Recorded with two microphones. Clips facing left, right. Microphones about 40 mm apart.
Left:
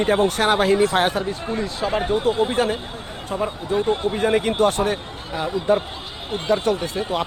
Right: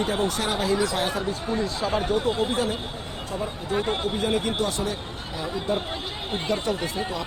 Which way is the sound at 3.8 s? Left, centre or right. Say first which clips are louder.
Left 5 dB; right.